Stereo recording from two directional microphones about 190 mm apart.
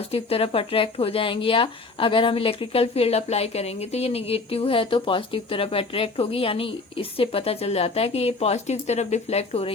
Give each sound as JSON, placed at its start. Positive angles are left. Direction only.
{"t": 0.1, "sound": "speech", "side_deg": 30}